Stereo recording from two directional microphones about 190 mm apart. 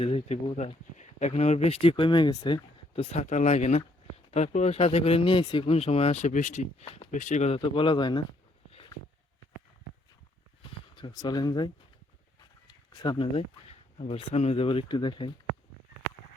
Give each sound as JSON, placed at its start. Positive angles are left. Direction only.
{"t": 0.0, "sound": "speech", "side_deg": 30}
{"t": 10.9, "sound": "speech", "side_deg": 20}
{"t": 12.6, "sound": "a sound", "side_deg": 20}
{"t": 14.0, "sound": "speech", "side_deg": 30}